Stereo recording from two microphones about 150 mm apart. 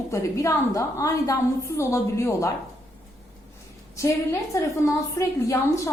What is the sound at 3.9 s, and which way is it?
A woman's voice, 20° left (ahead or behind).